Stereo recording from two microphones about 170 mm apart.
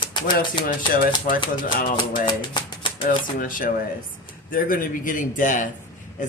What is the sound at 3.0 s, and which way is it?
Speech, 55° left (ahead or behind).